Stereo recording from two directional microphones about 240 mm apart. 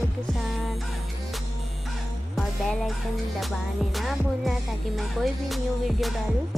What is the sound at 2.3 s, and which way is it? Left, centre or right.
Music, centre.